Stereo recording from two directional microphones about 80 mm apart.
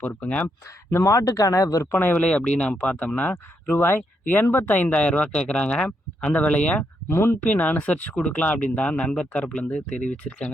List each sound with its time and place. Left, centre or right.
0.0 s speech: centre
0.4 s speech: left
2.1 s speech: centre
3.3 s speech: left
7.1 s speech: left
7.4 s speech: centre